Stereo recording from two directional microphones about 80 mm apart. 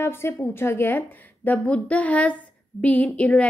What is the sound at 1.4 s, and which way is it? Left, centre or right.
A woman's voice, centre.